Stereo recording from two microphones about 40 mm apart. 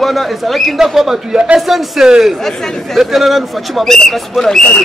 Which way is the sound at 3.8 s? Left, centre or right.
Centre.